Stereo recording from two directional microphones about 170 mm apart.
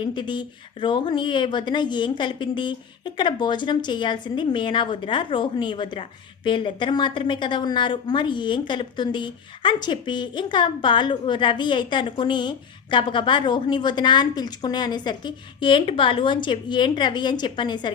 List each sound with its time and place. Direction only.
0.0 s a woman's voice: 25° left (ahead or behind)